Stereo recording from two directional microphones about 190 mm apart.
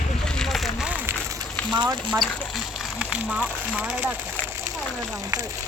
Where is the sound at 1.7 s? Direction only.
25° right (ahead or behind).